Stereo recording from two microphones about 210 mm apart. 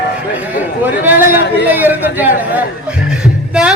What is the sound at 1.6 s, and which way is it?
Speech, 10° right (ahead or behind).